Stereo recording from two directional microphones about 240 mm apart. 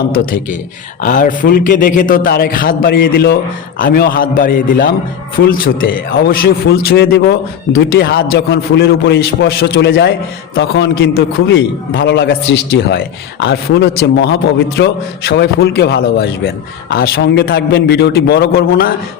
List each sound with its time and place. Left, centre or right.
1.0 s a man's voice: left